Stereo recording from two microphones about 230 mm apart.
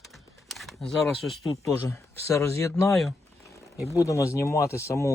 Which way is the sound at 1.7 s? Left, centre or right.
Centre.